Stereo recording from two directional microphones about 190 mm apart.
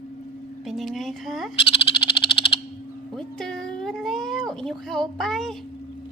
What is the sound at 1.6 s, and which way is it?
Frog, 25° left (ahead or behind).